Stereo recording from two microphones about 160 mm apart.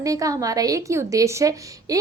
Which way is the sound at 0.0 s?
20° right (ahead or behind).